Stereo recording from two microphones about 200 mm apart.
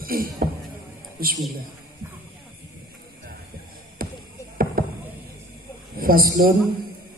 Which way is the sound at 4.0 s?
45° right (ahead or behind).